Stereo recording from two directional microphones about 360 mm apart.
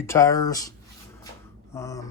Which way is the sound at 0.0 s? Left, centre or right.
Centre.